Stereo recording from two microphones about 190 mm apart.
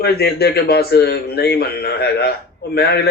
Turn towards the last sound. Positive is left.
turn(degrees=55)  # may be behind; listen again after turning